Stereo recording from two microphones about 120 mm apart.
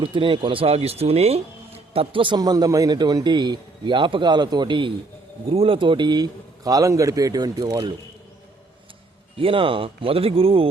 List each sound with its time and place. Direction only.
0.0 s speech: 45° right (ahead or behind)
2.4 s a man's voice: 30° right (ahead or behind)
9.4 s speech: 50° right (ahead or behind)